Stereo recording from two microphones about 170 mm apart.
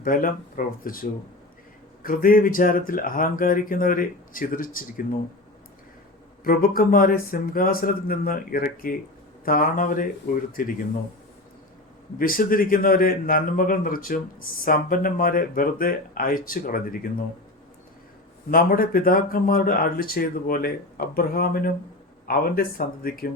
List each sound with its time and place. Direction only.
0.0 s a man's voice: 55° left (ahead or behind)
2.0 s a man's voice: 55° left (ahead or behind)
6.4 s a man's voice: 60° left (ahead or behind)
12.2 s a man's voice: 55° left (ahead or behind)
18.5 s a man's voice: 60° left (ahead or behind)